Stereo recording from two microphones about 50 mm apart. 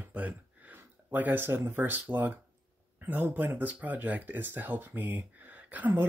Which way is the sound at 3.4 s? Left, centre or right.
Right.